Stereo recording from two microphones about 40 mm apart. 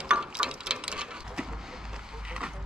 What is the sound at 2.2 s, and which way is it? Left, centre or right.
Music, right.